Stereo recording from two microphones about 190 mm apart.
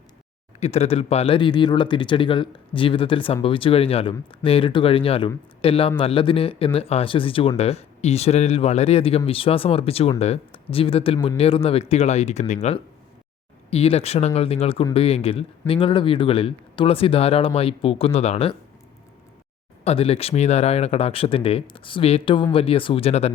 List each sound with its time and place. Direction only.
0.6 s speech: 30° left (ahead or behind)
13.7 s speech: 30° left (ahead or behind)
19.8 s speech: 30° left (ahead or behind)